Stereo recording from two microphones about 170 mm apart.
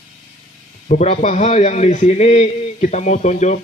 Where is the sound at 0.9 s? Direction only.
45° left (ahead or behind).